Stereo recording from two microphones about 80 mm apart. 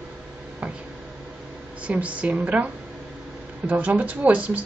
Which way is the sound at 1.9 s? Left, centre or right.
Centre.